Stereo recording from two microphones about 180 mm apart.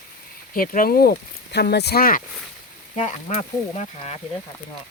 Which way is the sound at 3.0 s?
40° left (ahead or behind).